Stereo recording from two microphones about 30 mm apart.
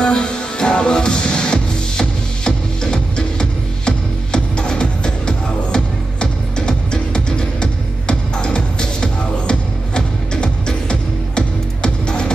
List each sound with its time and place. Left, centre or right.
0.0 s music: left